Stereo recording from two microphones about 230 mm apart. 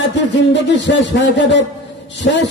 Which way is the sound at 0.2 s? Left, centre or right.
Left.